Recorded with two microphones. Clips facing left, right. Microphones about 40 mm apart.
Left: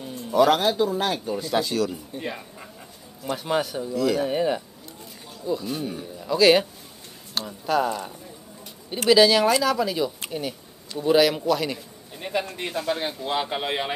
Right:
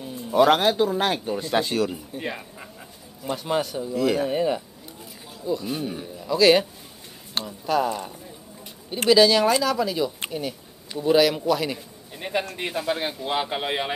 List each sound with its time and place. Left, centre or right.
0.3 s a man's voice: right
1.9 s speech: centre
3.3 s speech: centre
3.9 s a man's voice: right
4.3 s speech: centre
6.2 s speech: centre